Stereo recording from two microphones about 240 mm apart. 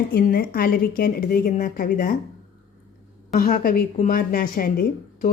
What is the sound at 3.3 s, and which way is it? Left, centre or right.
A woman's voice, left.